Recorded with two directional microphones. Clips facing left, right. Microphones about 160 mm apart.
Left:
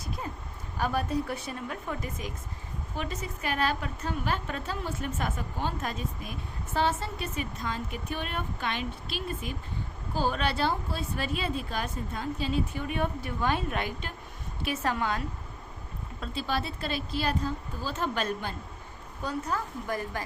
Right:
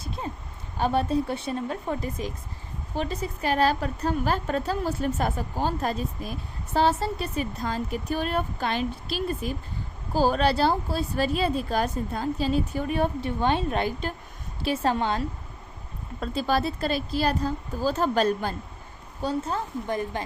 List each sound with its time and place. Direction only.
0.0 s a sound: 25° right (ahead or behind)
0.8 s a woman's voice: 30° right (ahead or behind)
16.2 s a woman's voice: 40° right (ahead or behind); by 20.2 s 25° right (ahead or behind)